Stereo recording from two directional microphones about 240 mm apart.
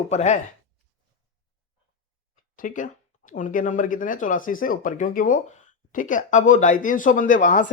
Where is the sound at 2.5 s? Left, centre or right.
Left.